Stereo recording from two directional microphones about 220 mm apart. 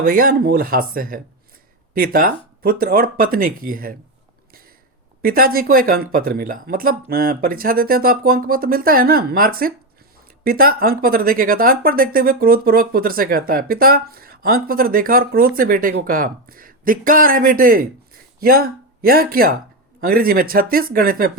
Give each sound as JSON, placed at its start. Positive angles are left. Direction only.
{"t": 0.0, "sound": "speech", "side_deg": -40}
{"t": 5.2, "sound": "speech", "side_deg": -40}